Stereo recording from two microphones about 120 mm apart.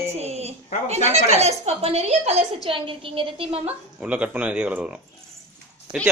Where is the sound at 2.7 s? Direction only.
45° right (ahead or behind).